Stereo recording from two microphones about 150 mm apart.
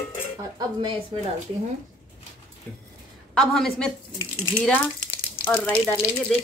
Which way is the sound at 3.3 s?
5° left (ahead or behind).